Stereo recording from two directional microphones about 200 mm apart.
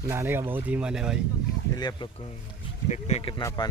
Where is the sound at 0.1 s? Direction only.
10° right (ahead or behind).